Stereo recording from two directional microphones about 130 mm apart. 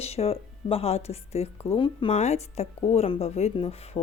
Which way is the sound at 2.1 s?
60° left (ahead or behind).